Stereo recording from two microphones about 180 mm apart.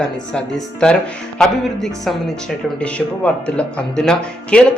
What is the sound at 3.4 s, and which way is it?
Speech, 5° left (ahead or behind).